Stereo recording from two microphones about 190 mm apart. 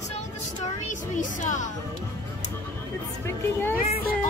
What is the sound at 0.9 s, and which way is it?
Speech, 40° left (ahead or behind).